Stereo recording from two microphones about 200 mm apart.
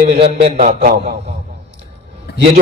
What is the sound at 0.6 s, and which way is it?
Music, 45° right (ahead or behind).